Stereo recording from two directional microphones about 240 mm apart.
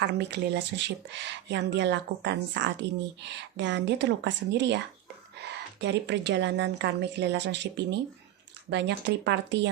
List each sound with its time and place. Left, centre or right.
0.0 s speech: right
5.8 s speech: right